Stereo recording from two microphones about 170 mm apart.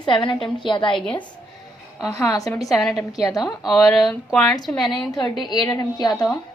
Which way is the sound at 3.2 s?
20° left (ahead or behind).